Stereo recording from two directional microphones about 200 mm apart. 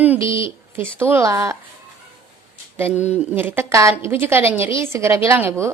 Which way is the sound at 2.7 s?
10° right (ahead or behind).